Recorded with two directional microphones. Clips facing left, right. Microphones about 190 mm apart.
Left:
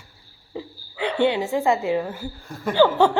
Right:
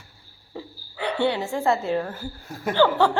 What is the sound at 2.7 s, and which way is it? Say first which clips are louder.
Speech: left 2 dB; 15° left (ahead or behind).